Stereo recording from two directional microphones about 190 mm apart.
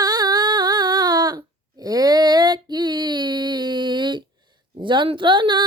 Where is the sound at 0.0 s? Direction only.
20° right (ahead or behind).